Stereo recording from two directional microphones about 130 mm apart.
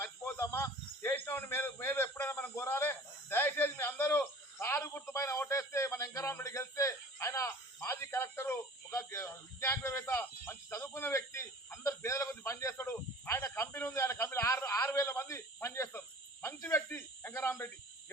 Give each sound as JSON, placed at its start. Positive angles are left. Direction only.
{"t": 0.0, "sound": "speech", "side_deg": 20}